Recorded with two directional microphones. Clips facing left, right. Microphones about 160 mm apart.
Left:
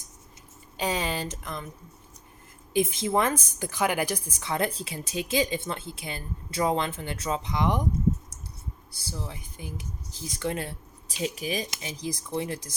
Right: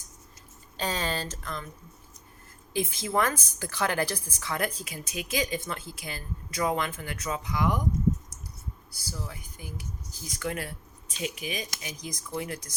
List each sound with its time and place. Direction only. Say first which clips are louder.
0.8 s speech: left 2 dB; 15° left (ahead or behind)
2.7 s a woman's voice: left 3 dB; 20° left (ahead or behind)
8.9 s a woman's voice: left 2 dB; 25° left (ahead or behind)